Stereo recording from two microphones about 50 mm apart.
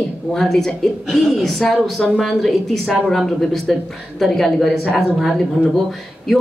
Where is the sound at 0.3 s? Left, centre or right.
Centre.